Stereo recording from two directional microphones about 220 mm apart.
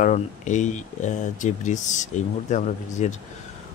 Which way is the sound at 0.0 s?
35° left (ahead or behind).